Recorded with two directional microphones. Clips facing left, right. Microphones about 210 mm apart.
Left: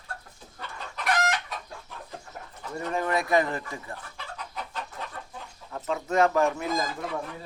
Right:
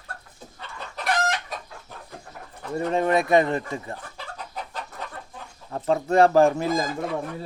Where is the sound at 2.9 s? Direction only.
25° right (ahead or behind).